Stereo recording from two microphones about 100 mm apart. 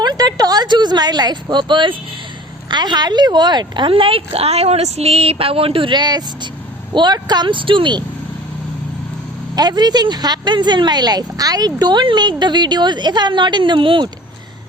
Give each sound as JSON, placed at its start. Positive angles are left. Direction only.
{"t": 0.0, "sound": "speech", "side_deg": -45}
{"t": 9.6, "sound": "speech", "side_deg": -45}